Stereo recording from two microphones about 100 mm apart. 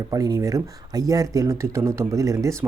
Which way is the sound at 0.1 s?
35° right (ahead or behind).